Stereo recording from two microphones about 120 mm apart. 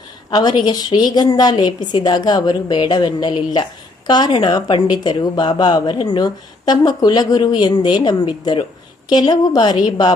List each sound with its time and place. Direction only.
0.3 s a woman's voice: 35° left (ahead or behind)